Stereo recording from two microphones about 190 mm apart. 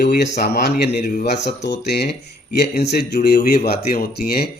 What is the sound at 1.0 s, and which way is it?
Speech, 40° left (ahead or behind).